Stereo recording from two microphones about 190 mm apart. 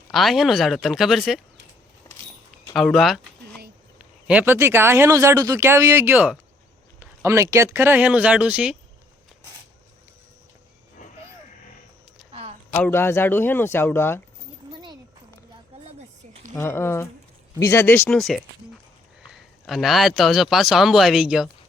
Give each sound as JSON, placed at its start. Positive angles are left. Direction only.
{"t": 0.1, "sound": "a man's voice", "side_deg": 0}
{"t": 2.0, "sound": "vehicle", "side_deg": 15}
{"t": 2.7, "sound": "speech", "side_deg": 0}
{"t": 12.3, "sound": "a sound", "side_deg": -30}
{"t": 12.7, "sound": "a man's voice", "side_deg": 10}
{"t": 14.7, "sound": "a sound", "side_deg": -25}
{"t": 16.6, "sound": "a man's voice", "side_deg": 10}
{"t": 18.2, "sound": "a man's voice", "side_deg": 0}